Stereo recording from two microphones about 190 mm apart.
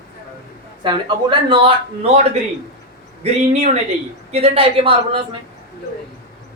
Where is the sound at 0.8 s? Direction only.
25° right (ahead or behind).